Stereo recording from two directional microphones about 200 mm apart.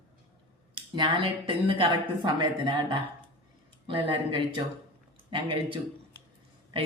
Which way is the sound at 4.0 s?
25° right (ahead or behind).